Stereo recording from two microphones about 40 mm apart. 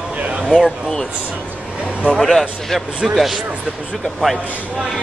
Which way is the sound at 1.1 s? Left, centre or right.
Right.